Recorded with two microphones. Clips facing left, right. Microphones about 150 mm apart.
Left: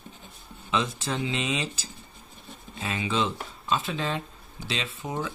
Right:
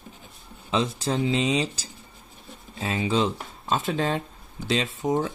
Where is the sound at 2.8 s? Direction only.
35° right (ahead or behind).